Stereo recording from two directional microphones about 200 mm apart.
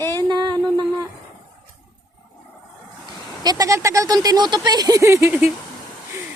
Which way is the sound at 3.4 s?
20° right (ahead or behind).